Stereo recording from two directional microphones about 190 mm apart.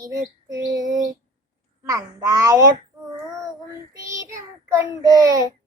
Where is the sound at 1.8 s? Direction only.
20° right (ahead or behind).